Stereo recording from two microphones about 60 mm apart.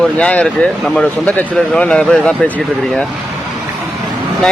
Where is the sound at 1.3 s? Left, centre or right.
Centre.